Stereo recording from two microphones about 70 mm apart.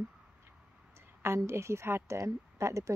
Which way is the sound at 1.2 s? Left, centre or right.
Right.